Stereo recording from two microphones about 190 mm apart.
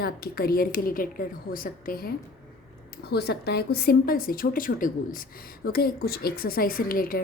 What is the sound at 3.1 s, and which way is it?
A woman's voice, 60° left (ahead or behind).